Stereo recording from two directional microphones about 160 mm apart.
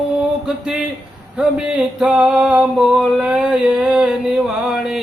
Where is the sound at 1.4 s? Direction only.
5° right (ahead or behind).